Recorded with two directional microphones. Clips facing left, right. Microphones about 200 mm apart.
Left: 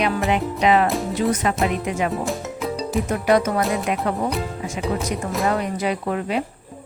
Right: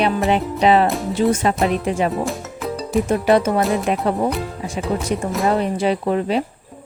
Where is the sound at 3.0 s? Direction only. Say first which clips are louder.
Right 2 dB; 30° right (ahead or behind).